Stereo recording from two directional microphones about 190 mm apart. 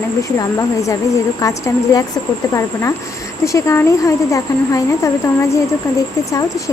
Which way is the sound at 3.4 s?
15° left (ahead or behind).